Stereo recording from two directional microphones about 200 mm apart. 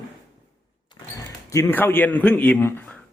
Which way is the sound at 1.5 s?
15° left (ahead or behind).